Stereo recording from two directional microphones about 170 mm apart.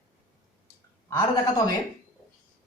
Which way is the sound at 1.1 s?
20° left (ahead or behind).